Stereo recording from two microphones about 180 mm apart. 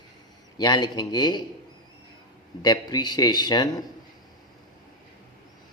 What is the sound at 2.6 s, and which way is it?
Speech, 20° left (ahead or behind).